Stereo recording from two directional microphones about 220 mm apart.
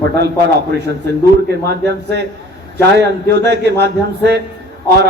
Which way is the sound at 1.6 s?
50° right (ahead or behind).